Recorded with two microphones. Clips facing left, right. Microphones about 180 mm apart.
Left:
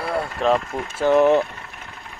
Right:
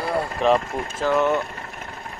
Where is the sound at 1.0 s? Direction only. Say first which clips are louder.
Left 5 dB; 30° left (ahead or behind).